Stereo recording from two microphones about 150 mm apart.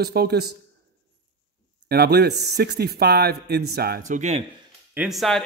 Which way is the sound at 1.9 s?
90° right.